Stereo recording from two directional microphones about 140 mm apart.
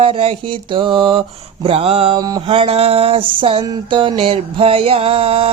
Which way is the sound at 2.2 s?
30° right (ahead or behind).